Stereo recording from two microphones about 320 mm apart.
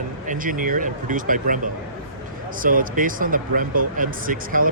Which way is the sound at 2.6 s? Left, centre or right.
Right.